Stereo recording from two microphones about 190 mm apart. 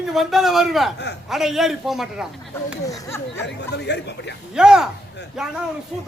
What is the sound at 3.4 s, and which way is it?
Speech, 65° left (ahead or behind).